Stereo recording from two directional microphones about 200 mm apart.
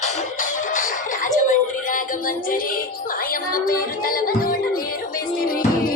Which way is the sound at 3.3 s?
45° left (ahead or behind).